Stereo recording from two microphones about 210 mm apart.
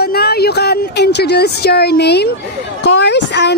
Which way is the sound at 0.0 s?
50° left (ahead or behind).